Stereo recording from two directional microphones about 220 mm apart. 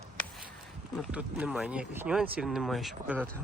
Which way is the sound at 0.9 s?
5° right (ahead or behind).